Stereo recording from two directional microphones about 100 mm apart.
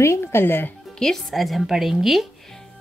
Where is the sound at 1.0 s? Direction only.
5° left (ahead or behind).